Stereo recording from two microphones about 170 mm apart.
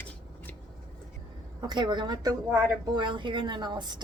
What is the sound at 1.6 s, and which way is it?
A woman's voice, 25° right (ahead or behind).